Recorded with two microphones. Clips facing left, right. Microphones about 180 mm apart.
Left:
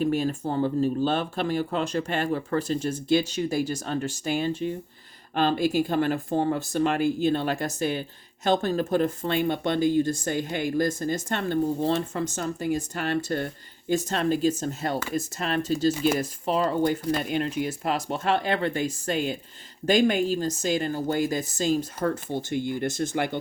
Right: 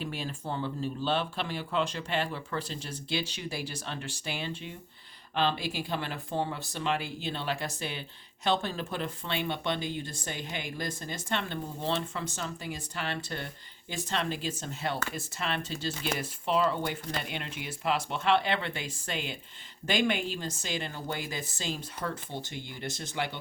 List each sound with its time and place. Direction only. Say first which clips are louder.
0.0 s speech: left 12 dB; 45° left (ahead or behind)